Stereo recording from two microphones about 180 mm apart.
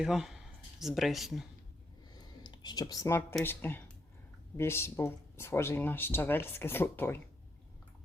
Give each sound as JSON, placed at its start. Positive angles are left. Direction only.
{"t": 0.0, "sound": "speech", "side_deg": 0}
{"t": 2.1, "sound": "a sound", "side_deg": 25}
{"t": 3.4, "sound": "speech", "side_deg": 10}